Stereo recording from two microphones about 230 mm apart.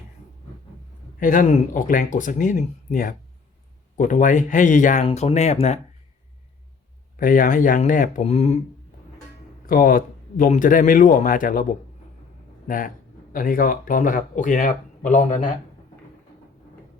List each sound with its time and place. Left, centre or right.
1.2 s speech: left
7.2 s speech: left
9.6 s speech: left
12.6 s speech: left